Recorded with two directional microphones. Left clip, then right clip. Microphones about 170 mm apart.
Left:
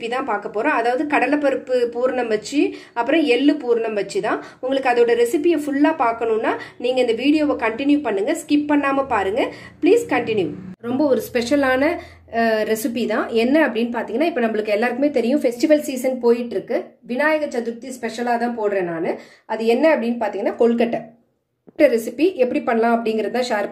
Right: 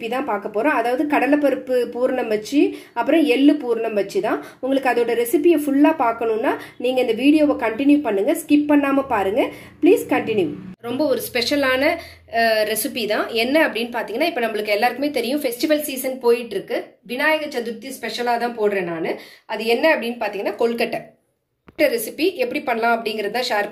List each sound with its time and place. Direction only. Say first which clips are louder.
0.1 s a woman's voice: even; 30° right (ahead or behind)
10.9 s speech: left 2 dB; 50° left (ahead or behind)